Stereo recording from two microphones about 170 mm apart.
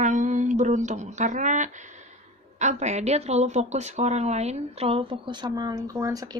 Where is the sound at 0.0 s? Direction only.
45° right (ahead or behind).